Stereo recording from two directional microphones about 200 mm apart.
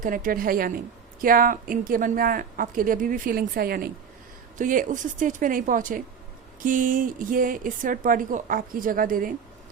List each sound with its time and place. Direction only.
0.0 s a woman's voice: 45° right (ahead or behind)